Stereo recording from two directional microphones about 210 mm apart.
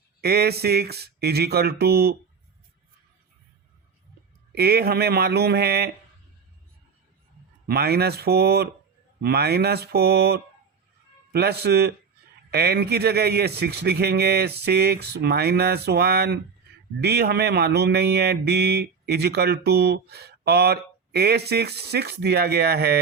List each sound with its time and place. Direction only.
0.2 s speech: 50° right (ahead or behind)
4.5 s speech: 50° right (ahead or behind)
7.7 s speech: 50° right (ahead or behind)